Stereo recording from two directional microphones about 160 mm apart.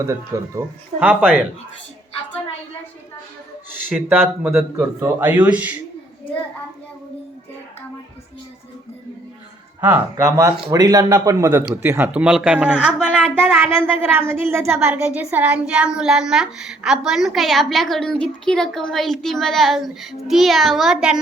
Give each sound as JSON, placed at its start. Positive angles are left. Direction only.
{"t": 0.0, "sound": "speech", "side_deg": -20}
{"t": 3.8, "sound": "speech", "side_deg": -10}
{"t": 9.8, "sound": "a woman's voice", "side_deg": -15}